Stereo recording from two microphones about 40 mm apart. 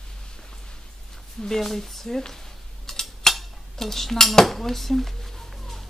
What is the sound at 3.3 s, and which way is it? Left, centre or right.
Dishes, centre.